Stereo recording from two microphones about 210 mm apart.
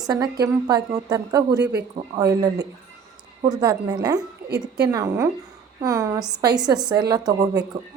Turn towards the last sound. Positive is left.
turn(degrees=-20)  # may be behind; listen again after turning